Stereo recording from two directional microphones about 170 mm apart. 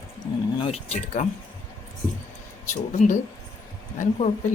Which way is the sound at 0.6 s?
40° left (ahead or behind).